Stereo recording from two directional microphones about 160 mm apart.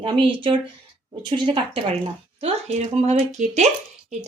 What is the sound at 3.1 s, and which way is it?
Speech, 45° right (ahead or behind).